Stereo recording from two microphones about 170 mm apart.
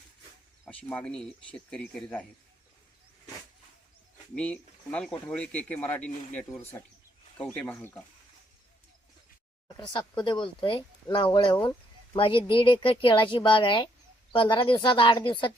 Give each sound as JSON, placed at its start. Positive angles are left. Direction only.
{"t": 0.6, "sound": "speech", "side_deg": 10}
{"t": 4.4, "sound": "speech", "side_deg": 5}
{"t": 9.7, "sound": "a woman's voice", "side_deg": 25}